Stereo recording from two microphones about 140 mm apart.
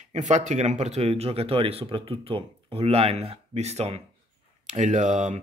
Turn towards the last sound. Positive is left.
turn(degrees=-55)  # may be behind; listen again after turning